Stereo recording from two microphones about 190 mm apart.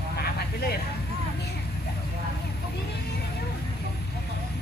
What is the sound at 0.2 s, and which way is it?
Vehicle, 55° left (ahead or behind).